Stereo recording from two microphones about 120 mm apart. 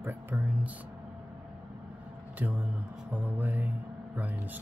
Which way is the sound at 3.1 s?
15° right (ahead or behind).